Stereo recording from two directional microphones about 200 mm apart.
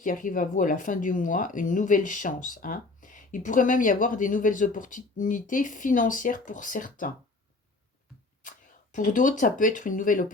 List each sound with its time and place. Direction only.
0.0 s speech: 40° left (ahead or behind)
9.0 s speech: 40° left (ahead or behind)